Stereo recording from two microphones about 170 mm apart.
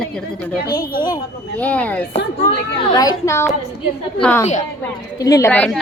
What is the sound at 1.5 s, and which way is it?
Speech, 10° left (ahead or behind).